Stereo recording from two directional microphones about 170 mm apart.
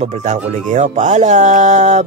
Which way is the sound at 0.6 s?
45° right (ahead or behind).